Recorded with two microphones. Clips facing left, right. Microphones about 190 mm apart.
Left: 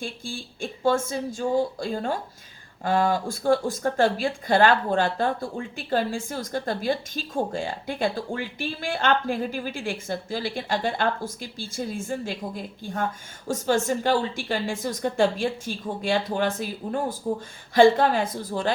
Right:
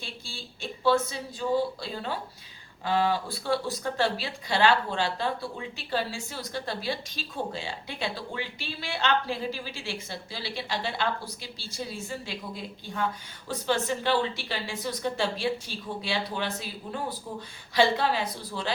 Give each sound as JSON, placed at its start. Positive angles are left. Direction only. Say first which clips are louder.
{"t": 0.0, "sound": "speech", "louder": "left 8 dB", "side_deg": 50}